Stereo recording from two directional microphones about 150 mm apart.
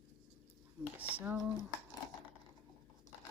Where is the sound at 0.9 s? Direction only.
10° right (ahead or behind).